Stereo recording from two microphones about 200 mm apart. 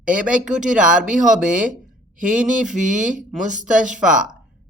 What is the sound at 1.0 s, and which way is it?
Speech, 40° right (ahead or behind).